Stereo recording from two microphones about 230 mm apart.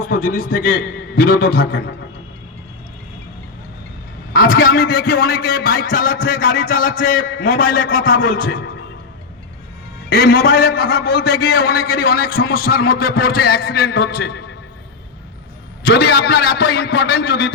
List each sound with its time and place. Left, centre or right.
0.1 s a man's voice: left
4.4 s a man's voice: left
10.1 s a man's voice: left
15.8 s a man's voice: left